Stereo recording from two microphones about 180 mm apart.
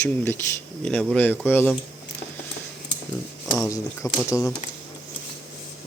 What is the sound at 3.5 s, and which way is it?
Speech, 20° left (ahead or behind).